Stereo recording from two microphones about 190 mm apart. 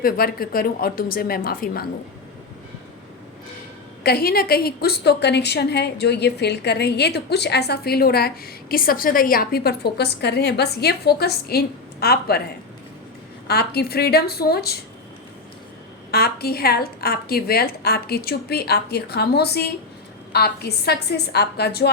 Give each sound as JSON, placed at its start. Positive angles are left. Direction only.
{"t": 0.0, "sound": "speech", "side_deg": 50}
{"t": 4.0, "sound": "a woman's voice", "side_deg": 55}
{"t": 13.5, "sound": "a woman's voice", "side_deg": 55}
{"t": 16.1, "sound": "a woman's voice", "side_deg": 55}